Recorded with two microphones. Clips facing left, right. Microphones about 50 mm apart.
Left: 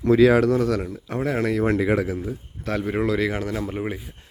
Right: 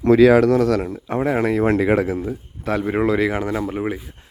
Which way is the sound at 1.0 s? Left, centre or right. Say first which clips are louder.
Right 4 dB; right.